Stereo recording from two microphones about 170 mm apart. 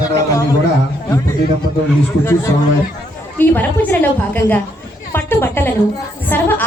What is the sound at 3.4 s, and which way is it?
A woman's voice, 10° left (ahead or behind).